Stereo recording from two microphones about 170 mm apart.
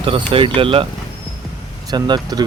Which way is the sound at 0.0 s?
30° right (ahead or behind).